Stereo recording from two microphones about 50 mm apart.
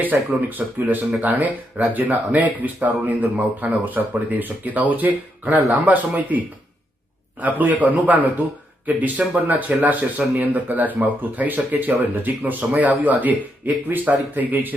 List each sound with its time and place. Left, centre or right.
0.0 s speech: right